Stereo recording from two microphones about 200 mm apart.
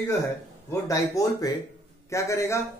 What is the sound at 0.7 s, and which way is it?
A man's voice, 15° left (ahead or behind).